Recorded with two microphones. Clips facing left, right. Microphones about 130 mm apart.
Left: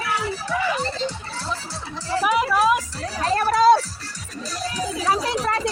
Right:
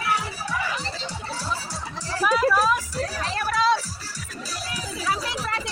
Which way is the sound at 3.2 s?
40° left (ahead or behind).